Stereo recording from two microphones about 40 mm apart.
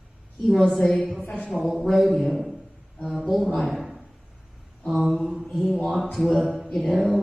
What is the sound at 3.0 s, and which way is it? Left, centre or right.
Speech, centre.